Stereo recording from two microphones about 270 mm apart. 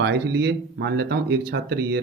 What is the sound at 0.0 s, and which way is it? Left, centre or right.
Speech, right.